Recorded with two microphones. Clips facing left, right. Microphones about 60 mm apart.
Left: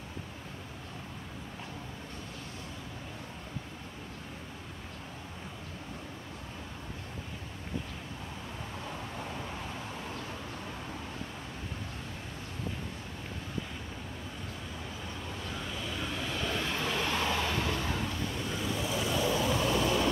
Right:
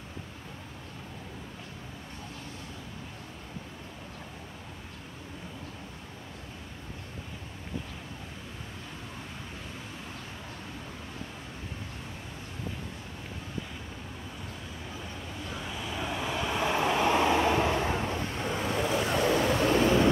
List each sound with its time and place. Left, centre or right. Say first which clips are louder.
15.5 s vehicle: right 3 dB; centre; by 19.9 s right